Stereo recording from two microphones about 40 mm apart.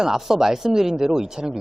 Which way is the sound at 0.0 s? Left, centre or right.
Centre.